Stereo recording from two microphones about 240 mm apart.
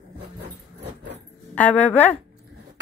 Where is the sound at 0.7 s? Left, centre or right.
Right.